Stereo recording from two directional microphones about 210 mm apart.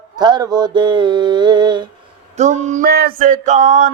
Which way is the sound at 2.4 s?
35° right (ahead or behind).